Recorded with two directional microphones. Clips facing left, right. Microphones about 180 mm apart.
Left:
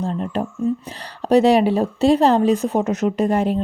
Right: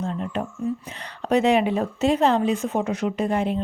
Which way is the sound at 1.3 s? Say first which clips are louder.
Left 5 dB; 35° left (ahead or behind).